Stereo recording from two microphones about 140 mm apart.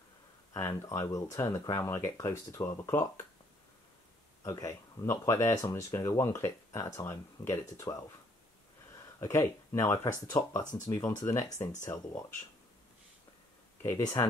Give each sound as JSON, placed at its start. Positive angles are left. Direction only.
{"t": 0.5, "sound": "speech", "side_deg": 20}
{"t": 4.5, "sound": "speech", "side_deg": 20}
{"t": 9.2, "sound": "speech", "side_deg": 20}
{"t": 13.8, "sound": "speech", "side_deg": 20}